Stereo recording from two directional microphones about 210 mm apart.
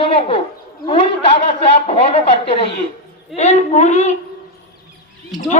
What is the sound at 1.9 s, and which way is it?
A man's voice, 30° left (ahead or behind).